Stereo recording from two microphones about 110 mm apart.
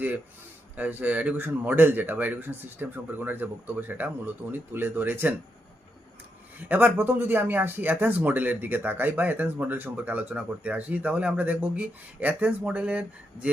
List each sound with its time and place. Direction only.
0.8 s speech: 15° right (ahead or behind)
6.7 s speech: 15° right (ahead or behind)